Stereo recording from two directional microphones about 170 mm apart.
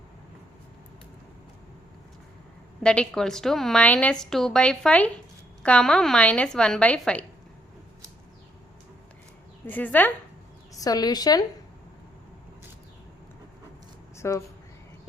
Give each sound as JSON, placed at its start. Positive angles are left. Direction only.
{"t": 2.8, "sound": "a woman's voice", "side_deg": 5}
{"t": 9.6, "sound": "speech", "side_deg": 10}
{"t": 10.8, "sound": "a woman's voice", "side_deg": 20}
{"t": 14.2, "sound": "speech", "side_deg": 15}